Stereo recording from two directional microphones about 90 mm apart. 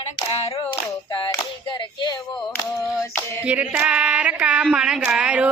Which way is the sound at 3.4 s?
15° right (ahead or behind).